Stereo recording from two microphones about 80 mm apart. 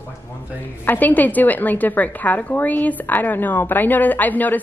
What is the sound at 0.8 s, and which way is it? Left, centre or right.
A woman's voice, left.